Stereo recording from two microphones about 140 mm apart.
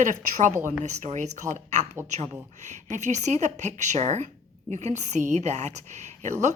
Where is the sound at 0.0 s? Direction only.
65° right (ahead or behind).